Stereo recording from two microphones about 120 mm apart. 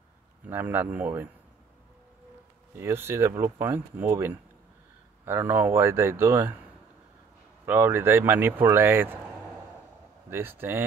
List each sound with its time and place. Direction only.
0.5 s speech: 15° right (ahead or behind)
2.7 s speech: 20° right (ahead or behind)
7.6 s speech: 20° right (ahead or behind)